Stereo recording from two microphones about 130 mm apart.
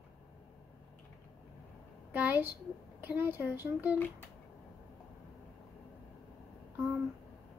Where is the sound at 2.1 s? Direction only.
15° right (ahead or behind).